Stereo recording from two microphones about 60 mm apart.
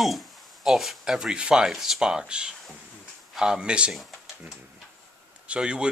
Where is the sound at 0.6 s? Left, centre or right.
Centre.